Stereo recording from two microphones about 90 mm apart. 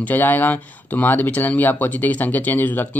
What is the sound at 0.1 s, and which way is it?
Speech, 20° left (ahead or behind).